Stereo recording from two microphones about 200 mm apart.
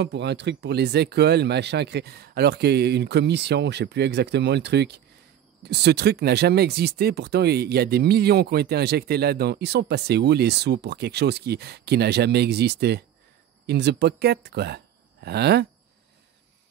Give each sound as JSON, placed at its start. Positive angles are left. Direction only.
{"t": 0.0, "sound": "speech", "side_deg": -60}